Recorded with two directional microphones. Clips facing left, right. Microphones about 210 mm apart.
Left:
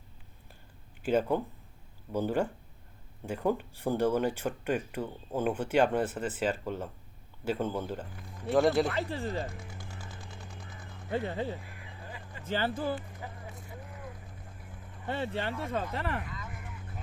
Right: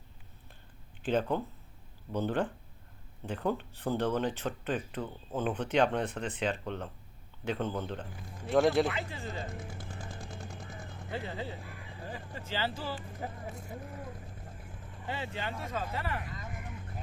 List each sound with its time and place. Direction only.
1.0 s speech: 10° left (ahead or behind)
8.9 s speech: 60° left (ahead or behind)
11.1 s speech: 50° left (ahead or behind)
12.0 s a sound: 35° right (ahead or behind)
12.5 s speech: 50° left (ahead or behind)
13.2 s speech: 40° right (ahead or behind)
15.0 s speech: 55° left (ahead or behind)